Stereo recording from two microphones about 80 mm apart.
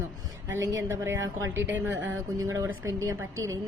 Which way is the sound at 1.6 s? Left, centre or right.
Right.